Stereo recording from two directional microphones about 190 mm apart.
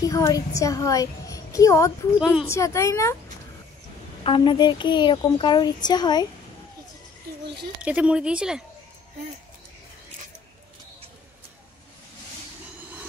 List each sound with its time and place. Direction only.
0.0 s a child's voice: 15° left (ahead or behind)
2.1 s speech: 5° right (ahead or behind)
2.5 s a woman's voice: 15° left (ahead or behind)
4.2 s speech: 25° left (ahead or behind)
7.8 s speech: 5° right (ahead or behind)